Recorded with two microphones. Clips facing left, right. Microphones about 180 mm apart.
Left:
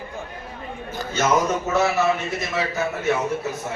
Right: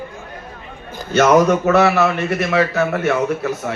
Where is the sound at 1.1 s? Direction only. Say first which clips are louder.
Right 8 dB; 75° right (ahead or behind).